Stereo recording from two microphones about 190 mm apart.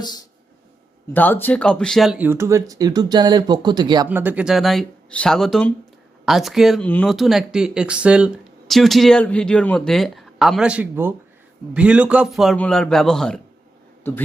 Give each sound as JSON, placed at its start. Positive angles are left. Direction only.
{"t": 1.1, "sound": "speech", "side_deg": 10}
{"t": 4.1, "sound": "speech", "side_deg": -10}